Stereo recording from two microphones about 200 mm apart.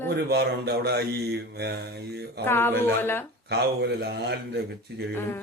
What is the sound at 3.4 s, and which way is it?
Mantra, 55° right (ahead or behind).